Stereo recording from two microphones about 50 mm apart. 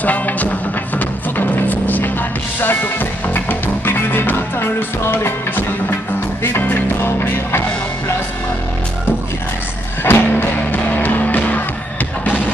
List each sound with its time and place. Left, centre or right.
0.0 s music: left
6.4 s music: left
10.0 s music: left